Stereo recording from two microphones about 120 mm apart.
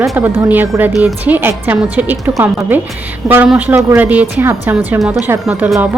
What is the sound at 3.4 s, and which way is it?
Speech, 5° right (ahead or behind).